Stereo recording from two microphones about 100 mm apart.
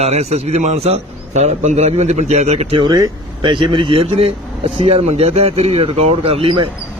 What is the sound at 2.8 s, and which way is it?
Speech, 40° right (ahead or behind).